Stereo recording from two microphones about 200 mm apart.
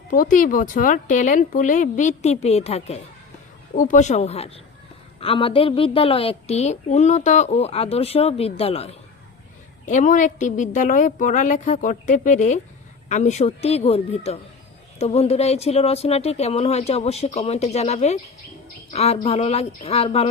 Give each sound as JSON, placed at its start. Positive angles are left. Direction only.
{"t": 0.1, "sound": "a woman's voice", "side_deg": 40}